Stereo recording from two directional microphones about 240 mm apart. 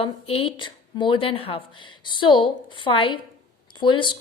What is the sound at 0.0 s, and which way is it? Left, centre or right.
A woman's voice, left.